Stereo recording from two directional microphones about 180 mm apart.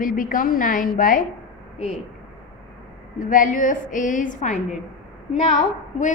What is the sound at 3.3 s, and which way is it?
A woman's voice, 45° left (ahead or behind).